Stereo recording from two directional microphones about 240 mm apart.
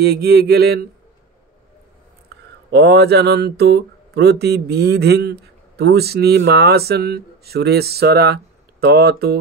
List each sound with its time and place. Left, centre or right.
0.0 s mantra: right
2.7 s speech: right
8.8 s mantra: right